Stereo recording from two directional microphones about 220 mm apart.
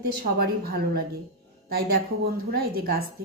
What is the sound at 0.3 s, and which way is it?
Speech, 45° right (ahead or behind).